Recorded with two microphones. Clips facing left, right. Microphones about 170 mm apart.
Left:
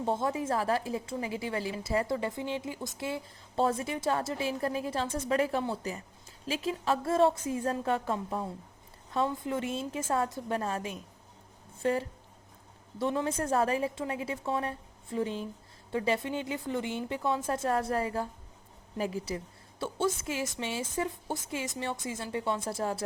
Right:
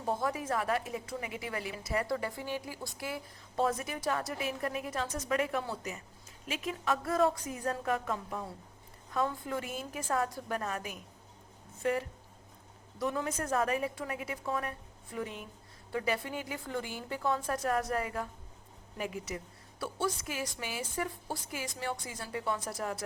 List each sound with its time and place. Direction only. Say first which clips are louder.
0.0 s a woman's voice: left 3 dB; 25° left (ahead or behind)